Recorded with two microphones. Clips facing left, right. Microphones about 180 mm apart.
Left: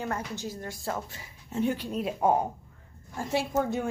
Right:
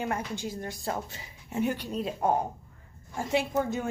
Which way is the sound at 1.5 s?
Centre (ahead or behind).